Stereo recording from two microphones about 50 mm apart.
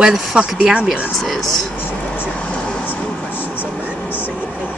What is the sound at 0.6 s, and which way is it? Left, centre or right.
Speech, centre.